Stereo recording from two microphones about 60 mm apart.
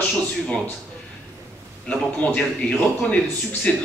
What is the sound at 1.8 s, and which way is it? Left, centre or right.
A man's voice, centre.